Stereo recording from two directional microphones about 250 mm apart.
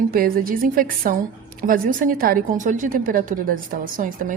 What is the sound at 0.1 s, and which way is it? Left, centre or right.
A woman's voice, right.